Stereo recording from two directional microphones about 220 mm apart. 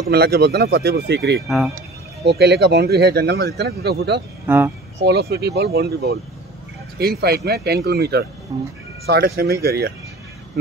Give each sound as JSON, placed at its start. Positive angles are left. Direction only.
{"t": 0.1, "sound": "speech", "side_deg": -45}
{"t": 4.5, "sound": "speech", "side_deg": -10}
{"t": 5.0, "sound": "speech", "side_deg": -45}
{"t": 8.5, "sound": "speech", "side_deg": -15}
{"t": 9.0, "sound": "speech", "side_deg": -45}